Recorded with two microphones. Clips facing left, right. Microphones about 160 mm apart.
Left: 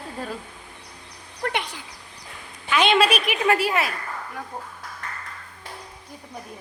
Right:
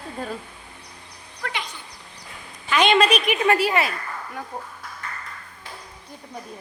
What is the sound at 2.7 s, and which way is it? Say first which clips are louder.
A woman's voice: right 1 dB; centre (ahead or behind).